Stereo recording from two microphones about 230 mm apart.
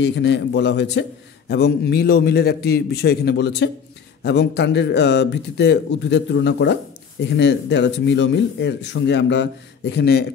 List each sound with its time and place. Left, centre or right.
0.0 s a man's voice: left